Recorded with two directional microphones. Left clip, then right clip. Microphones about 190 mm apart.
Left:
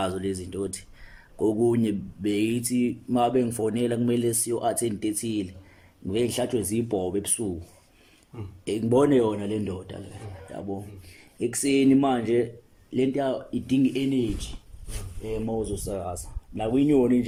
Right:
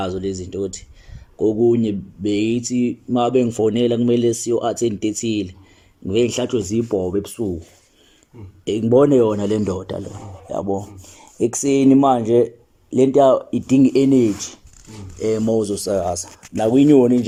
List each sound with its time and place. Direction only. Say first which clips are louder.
0.0 s speech: right 5 dB; 5° left (ahead or behind)
8.6 s speech: right 7 dB; centre (ahead or behind); by 10.0 s 20° right (ahead or behind)
11.3 s speech: right 6 dB; 15° right (ahead or behind); by 14.5 s 35° right (ahead or behind)
15.7 s speech: right 11 dB; 20° right (ahead or behind)